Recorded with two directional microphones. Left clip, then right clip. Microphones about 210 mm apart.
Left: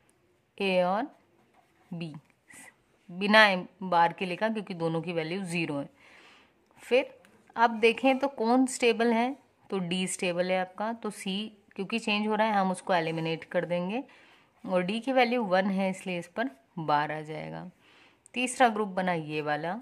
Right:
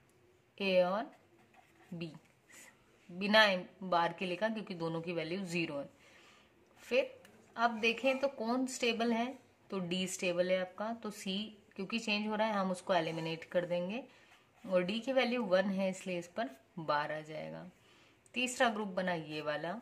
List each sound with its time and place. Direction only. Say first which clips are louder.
0.6 s a woman's voice: left 4 dB; 35° left (ahead or behind)
3.2 s a woman's voice: left 7 dB; 35° left (ahead or behind)